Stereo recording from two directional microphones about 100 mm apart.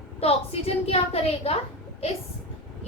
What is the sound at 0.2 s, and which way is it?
A woman's voice, 80° left.